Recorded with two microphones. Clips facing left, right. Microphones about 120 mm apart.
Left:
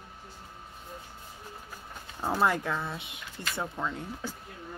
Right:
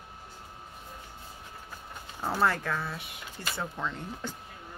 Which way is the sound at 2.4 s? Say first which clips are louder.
Even; 15° left (ahead or behind).